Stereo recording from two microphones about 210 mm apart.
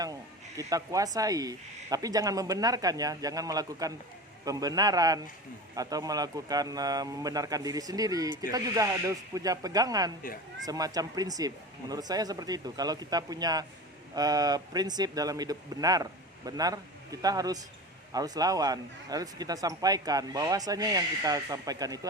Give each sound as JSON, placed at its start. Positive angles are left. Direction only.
{"t": 0.0, "sound": "speech", "side_deg": -15}